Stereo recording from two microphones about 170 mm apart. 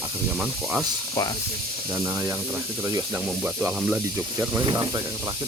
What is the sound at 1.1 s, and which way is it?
Speech, 20° left (ahead or behind).